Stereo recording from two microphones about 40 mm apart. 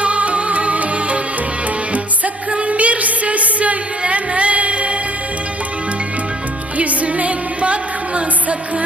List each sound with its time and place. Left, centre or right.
0.0 s music: right
2.5 s music: right
6.7 s music: right